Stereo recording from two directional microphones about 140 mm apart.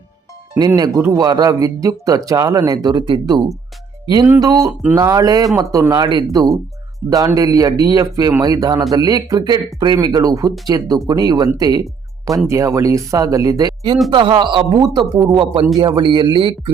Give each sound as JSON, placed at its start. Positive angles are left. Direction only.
{"t": 0.8, "sound": "speech", "side_deg": -25}